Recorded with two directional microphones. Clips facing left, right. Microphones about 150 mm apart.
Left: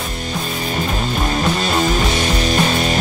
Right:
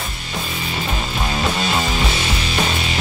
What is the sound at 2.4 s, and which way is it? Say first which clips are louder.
Music: left 6 dB; 45° left (ahead or behind).